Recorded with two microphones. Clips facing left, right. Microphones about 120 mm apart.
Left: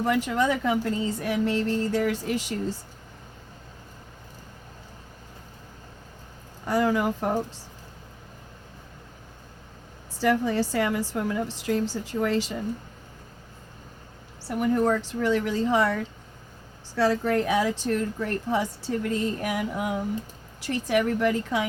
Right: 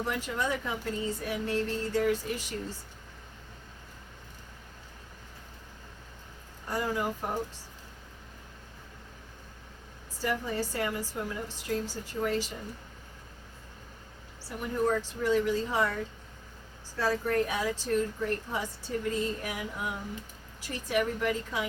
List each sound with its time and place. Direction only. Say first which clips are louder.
0.0 s speech: left 8 dB; 85° left
6.7 s a woman's voice: left 8 dB; 75° left (ahead or behind)
10.2 s a woman's voice: left 8 dB; 75° left (ahead or behind)
14.6 s speech: left 6 dB; 90° left
16.9 s speech: left 6 dB; 75° left (ahead or behind)